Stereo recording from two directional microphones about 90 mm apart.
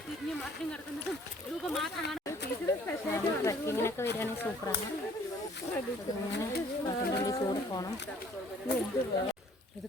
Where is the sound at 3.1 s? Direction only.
30° left (ahead or behind).